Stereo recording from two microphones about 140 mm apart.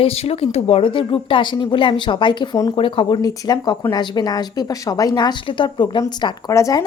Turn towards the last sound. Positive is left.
turn(degrees=25)  # may be behind; listen again after turning